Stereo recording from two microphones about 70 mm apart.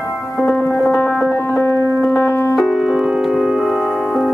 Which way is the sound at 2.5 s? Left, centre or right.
Centre.